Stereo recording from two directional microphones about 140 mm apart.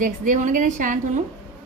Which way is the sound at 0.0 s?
65° right (ahead or behind).